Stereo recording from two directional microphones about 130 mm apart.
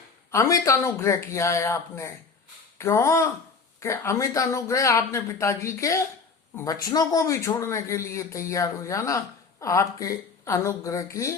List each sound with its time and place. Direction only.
0.3 s speech: 25° left (ahead or behind)